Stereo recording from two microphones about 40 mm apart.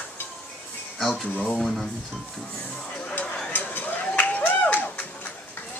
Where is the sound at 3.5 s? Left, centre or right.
Left.